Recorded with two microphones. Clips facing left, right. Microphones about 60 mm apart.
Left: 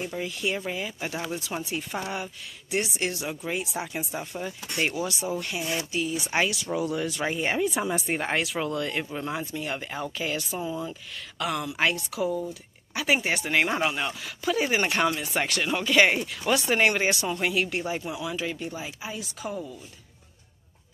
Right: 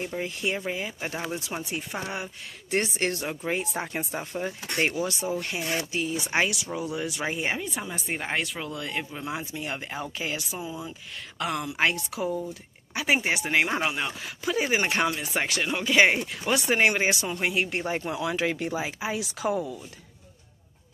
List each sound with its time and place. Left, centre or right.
0.0 s speech: right
2.7 s speech: right
5.6 s speech: right
5.9 s speech: right
6.7 s speech: centre
7.5 s speech: centre
9.3 s speech: centre
10.6 s speech: centre
11.3 s speech: right
14.4 s speech: right
18.1 s speech: right